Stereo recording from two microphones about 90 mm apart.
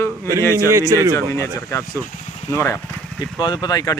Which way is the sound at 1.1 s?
35° left (ahead or behind).